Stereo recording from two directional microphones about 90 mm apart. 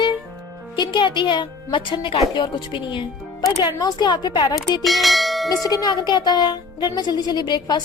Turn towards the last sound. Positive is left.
turn(degrees=55)  # may be behind; listen again after turning